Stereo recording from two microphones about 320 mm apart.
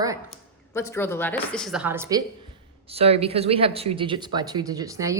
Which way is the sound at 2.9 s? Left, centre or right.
Centre.